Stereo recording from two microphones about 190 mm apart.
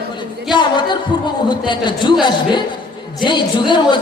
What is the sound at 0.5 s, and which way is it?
Music, 25° left (ahead or behind).